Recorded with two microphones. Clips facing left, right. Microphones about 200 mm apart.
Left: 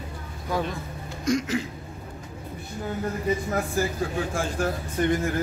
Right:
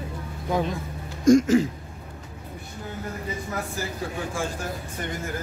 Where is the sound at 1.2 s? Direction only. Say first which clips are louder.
Right 9 dB; 45° right (ahead or behind).